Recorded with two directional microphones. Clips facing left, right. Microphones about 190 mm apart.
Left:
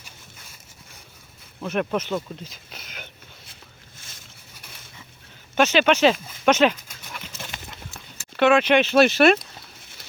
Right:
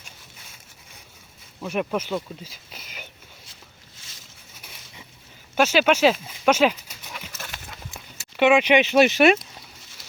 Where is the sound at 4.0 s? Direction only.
50° left (ahead or behind).